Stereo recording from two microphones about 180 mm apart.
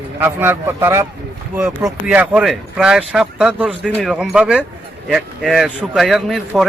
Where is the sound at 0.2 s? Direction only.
10° right (ahead or behind).